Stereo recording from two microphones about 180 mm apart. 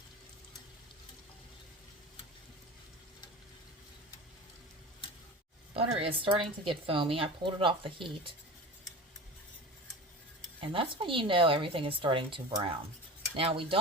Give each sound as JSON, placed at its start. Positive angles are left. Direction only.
{"t": 5.7, "sound": "speech", "side_deg": -35}
{"t": 10.6, "sound": "speech", "side_deg": -30}
{"t": 13.3, "sound": "cutlery", "side_deg": -30}